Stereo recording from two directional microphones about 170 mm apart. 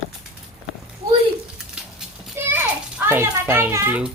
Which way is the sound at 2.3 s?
10° right (ahead or behind).